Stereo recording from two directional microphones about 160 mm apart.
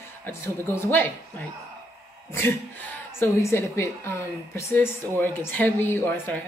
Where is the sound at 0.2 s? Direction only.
15° left (ahead or behind).